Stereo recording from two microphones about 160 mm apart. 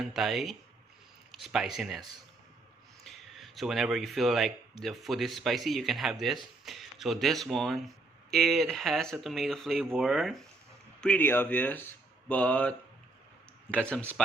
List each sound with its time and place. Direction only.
0.0 s speech: centre (ahead or behind)
14.2 s speech: 5° left (ahead or behind)